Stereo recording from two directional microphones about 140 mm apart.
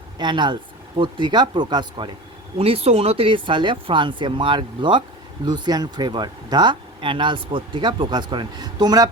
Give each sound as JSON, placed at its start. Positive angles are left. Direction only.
{"t": 0.2, "sound": "speech", "side_deg": -35}
{"t": 2.6, "sound": "speech", "side_deg": -45}